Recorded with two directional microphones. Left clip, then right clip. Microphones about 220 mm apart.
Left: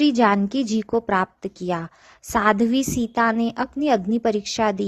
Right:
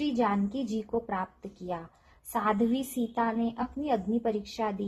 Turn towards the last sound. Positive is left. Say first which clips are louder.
# left 11 dB
turn(degrees=45)  # may be behind; listen again after turning